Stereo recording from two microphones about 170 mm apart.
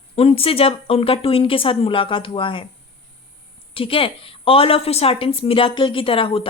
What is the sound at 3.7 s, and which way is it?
Speech, 35° left (ahead or behind).